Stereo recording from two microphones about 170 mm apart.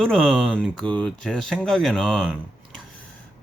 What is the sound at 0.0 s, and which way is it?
Speech, 5° right (ahead or behind).